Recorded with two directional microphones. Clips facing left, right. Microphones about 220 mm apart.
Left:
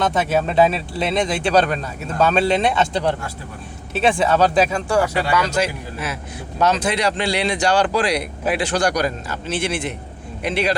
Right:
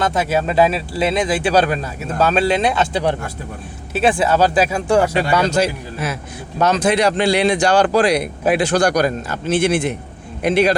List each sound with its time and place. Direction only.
0.0 s speech: centre (ahead or behind)
4.9 s a man's voice: 20° right (ahead or behind); by 10.8 s 45° right (ahead or behind)